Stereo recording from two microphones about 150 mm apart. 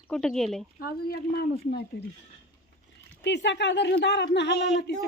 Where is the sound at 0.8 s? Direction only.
90° left.